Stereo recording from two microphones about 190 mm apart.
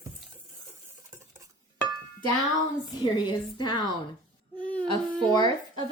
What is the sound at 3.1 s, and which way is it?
Speech, 25° left (ahead or behind).